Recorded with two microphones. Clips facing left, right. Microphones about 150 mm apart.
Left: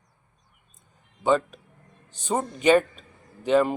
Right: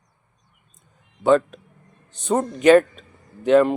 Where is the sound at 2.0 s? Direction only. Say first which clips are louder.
Right 4 dB; 35° left (ahead or behind).